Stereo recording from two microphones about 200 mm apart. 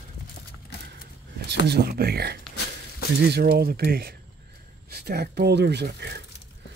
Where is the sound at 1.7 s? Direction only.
50° right (ahead or behind).